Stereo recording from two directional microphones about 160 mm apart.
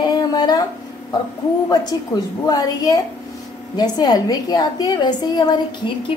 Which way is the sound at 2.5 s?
25° left (ahead or behind).